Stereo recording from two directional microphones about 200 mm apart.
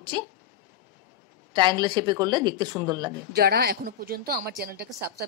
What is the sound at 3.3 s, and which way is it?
A woman's voice, 50° right (ahead or behind).